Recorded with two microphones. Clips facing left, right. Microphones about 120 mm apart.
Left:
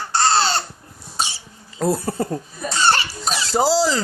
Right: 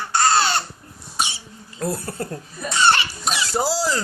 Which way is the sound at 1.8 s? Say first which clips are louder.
Left 6 dB; 90° left.